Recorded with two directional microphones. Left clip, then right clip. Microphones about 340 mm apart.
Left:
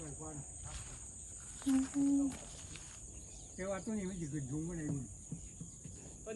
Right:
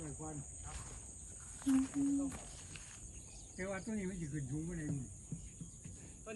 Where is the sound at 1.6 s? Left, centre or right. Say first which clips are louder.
Left 1 dB; centre.